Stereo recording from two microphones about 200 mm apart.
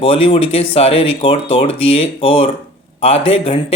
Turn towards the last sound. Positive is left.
turn(degrees=30)  # may be behind; listen again after turning